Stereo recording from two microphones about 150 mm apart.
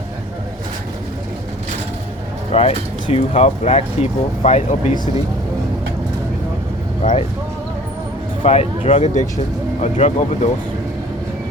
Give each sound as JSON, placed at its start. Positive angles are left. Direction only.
{"t": 2.5, "sound": "speech", "side_deg": 45}
{"t": 7.0, "sound": "speech", "side_deg": 45}
{"t": 8.4, "sound": "speech", "side_deg": 45}